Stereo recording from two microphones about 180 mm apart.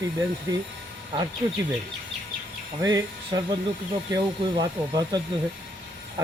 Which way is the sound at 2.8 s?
20° right (ahead or behind).